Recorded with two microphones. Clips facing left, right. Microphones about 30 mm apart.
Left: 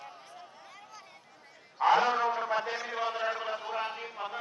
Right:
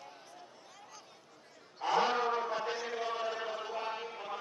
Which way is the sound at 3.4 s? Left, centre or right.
Centre.